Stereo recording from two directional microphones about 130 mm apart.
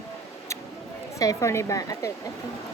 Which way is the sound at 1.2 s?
25° left (ahead or behind).